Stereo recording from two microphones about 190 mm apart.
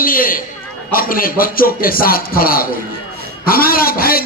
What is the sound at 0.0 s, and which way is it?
A man's voice, 50° left (ahead or behind).